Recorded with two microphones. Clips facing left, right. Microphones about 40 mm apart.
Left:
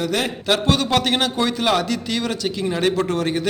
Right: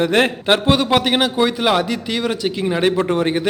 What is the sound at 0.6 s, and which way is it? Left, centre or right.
A man's voice, centre.